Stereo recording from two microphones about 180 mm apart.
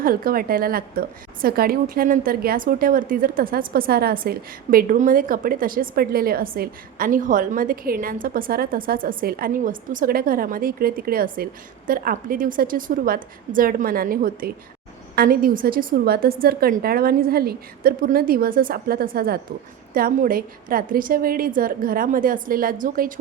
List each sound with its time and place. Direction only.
0.0 s a woman's voice: 55° right (ahead or behind)